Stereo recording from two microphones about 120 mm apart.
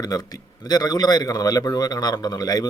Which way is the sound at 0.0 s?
35° left (ahead or behind).